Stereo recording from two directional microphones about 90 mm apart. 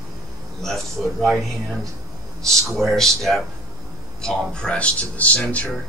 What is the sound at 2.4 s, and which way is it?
A man's voice, 5° left (ahead or behind).